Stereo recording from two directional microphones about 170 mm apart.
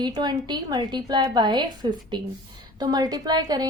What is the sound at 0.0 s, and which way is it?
A woman's voice, 25° right (ahead or behind).